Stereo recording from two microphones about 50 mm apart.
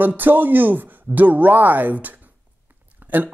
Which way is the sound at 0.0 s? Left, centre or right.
Right.